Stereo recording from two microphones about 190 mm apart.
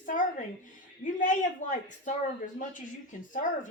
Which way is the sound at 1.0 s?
45° left (ahead or behind).